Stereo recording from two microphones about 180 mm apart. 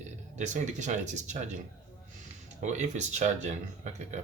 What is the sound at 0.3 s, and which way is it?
Speech, 40° right (ahead or behind).